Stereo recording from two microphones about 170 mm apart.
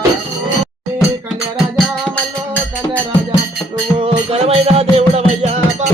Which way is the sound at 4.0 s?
35° right (ahead or behind).